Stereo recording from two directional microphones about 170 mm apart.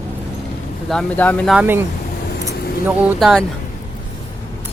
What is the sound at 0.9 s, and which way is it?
Speech, 10° left (ahead or behind).